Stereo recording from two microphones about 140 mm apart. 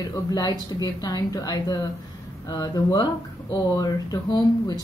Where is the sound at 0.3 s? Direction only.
30° left (ahead or behind).